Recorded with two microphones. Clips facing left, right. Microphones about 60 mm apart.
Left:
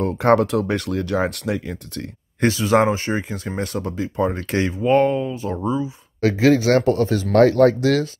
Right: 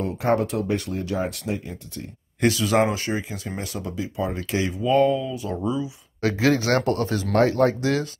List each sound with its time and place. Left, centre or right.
0.0 s speech: left
2.4 s speech: left
3.2 s speech: left
7.3 s speech: left